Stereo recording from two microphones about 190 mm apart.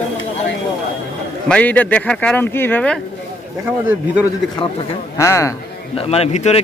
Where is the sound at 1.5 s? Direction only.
10° left (ahead or behind).